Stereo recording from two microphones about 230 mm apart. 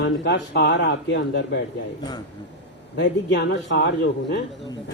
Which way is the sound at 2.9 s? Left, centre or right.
Left.